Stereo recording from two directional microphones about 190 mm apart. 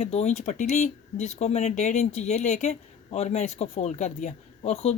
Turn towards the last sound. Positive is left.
turn(degrees=35)  # may be behind; listen again after turning